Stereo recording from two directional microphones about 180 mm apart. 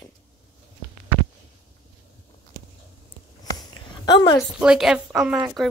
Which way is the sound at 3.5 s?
20° left (ahead or behind).